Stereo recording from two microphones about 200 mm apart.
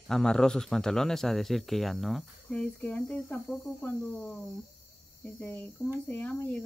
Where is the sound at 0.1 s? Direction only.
5° left (ahead or behind).